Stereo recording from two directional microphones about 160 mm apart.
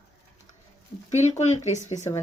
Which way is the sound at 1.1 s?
45° left (ahead or behind).